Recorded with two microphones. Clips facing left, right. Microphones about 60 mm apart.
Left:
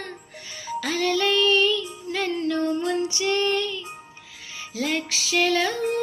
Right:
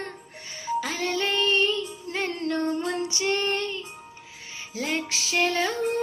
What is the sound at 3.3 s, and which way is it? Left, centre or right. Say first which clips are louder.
Child singing: left 3 dB; right.